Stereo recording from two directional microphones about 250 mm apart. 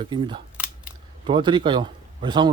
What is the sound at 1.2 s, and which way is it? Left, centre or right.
Speech, centre.